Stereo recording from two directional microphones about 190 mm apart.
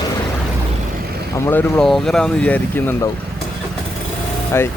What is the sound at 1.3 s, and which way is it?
Speech, 10° left (ahead or behind).